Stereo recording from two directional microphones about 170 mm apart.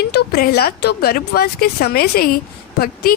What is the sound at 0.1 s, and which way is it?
A woman's voice, 70° left (ahead or behind).